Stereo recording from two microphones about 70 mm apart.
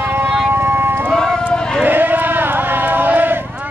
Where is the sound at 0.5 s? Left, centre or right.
Right.